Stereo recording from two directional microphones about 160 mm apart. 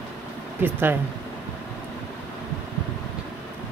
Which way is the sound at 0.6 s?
10° right (ahead or behind).